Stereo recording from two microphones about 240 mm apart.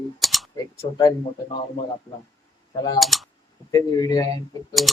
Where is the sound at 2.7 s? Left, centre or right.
Centre.